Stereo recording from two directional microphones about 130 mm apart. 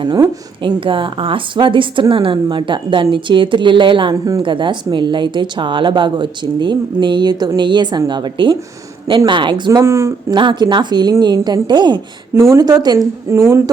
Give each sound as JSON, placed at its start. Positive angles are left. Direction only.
{"t": 0.6, "sound": "a woman's voice", "side_deg": -40}
{"t": 4.1, "sound": "speech", "side_deg": -25}
{"t": 4.4, "sound": "a woman's voice", "side_deg": -40}
{"t": 9.8, "sound": "speech", "side_deg": -20}
{"t": 10.3, "sound": "a woman's voice", "side_deg": -35}
{"t": 12.3, "sound": "speech", "side_deg": -20}